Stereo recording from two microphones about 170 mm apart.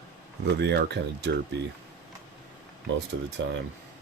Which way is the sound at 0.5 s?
85° right.